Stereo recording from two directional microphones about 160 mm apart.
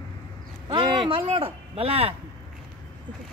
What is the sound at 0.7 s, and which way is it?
Speech, 30° right (ahead or behind).